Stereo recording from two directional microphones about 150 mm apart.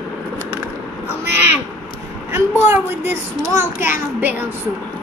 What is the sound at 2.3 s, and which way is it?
A child's voice, 15° right (ahead or behind).